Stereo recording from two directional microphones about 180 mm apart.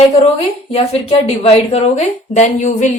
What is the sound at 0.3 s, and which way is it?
A woman's voice, 35° left (ahead or behind).